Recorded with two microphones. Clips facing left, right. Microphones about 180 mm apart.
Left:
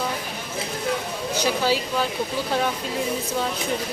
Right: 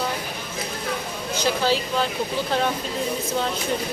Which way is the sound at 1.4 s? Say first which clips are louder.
Right 1 dB; 10° left (ahead or behind).